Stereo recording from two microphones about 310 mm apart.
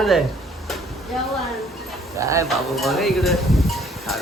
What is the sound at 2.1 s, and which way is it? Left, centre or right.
Speech, centre.